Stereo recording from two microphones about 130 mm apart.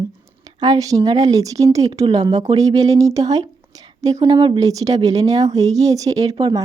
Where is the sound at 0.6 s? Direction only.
30° right (ahead or behind).